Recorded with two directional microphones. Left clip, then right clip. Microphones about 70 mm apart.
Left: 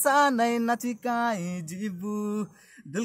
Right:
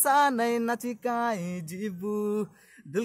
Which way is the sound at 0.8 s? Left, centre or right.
Centre.